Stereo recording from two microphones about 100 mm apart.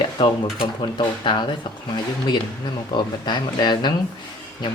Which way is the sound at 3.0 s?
50° left (ahead or behind).